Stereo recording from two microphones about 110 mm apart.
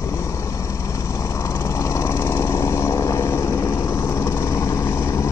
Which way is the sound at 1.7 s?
25° left (ahead or behind).